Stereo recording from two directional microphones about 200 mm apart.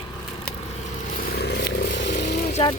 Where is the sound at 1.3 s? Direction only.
55° left (ahead or behind).